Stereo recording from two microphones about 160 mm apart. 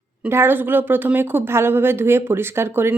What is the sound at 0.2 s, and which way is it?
A woman's voice, 15° right (ahead or behind).